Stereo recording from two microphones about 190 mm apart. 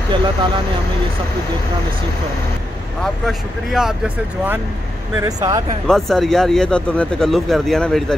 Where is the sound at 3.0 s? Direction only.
Centre (ahead or behind).